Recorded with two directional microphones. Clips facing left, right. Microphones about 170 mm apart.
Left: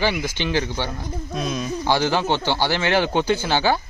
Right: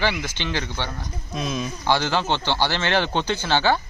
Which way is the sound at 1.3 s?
Centre (ahead or behind).